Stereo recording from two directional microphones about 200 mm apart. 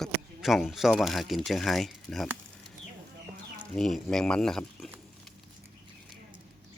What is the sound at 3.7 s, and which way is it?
Speech, centre (ahead or behind).